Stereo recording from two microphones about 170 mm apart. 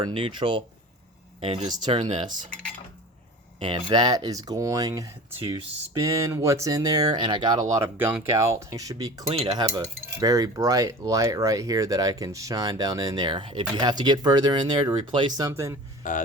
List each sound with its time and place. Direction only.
0.0 s cutlery: 30° right (ahead or behind)
1.4 s speech: 40° right (ahead or behind)
1.7 s cutlery: 25° right (ahead or behind)
3.6 s cutlery: 30° right (ahead or behind)
9.2 s cutlery: 35° right (ahead or behind); by 15.8 s 15° right (ahead or behind)
16.0 s speech: 50° left (ahead or behind)